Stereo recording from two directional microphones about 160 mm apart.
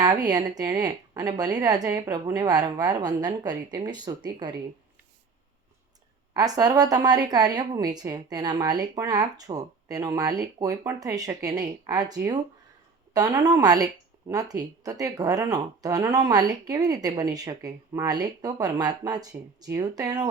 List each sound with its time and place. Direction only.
0.0 s speech: 25° right (ahead or behind)
6.3 s speech: 25° right (ahead or behind)